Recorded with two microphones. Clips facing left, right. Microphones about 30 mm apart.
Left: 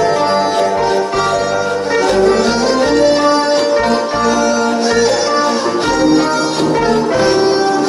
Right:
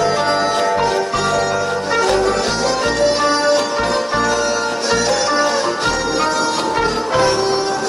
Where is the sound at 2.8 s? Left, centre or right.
Centre.